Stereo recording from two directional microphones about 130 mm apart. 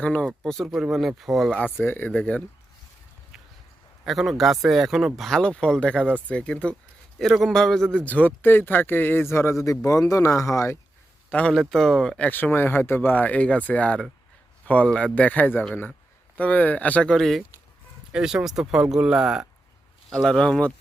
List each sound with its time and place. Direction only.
0.0 s speech: 5° left (ahead or behind)
4.0 s speech: centre (ahead or behind); by 10.8 s 20° left (ahead or behind)
11.3 s speech: 10° left (ahead or behind)